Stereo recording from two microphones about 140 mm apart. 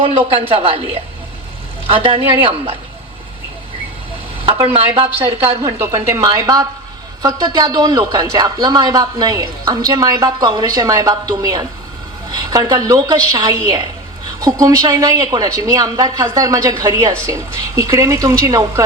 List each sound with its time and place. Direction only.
0.0 s a man's voice: 40° right (ahead or behind)
1.9 s a man's voice: 40° right (ahead or behind)
4.6 s a woman's voice: 40° right (ahead or behind)
5.6 s a man's voice: 25° right (ahead or behind)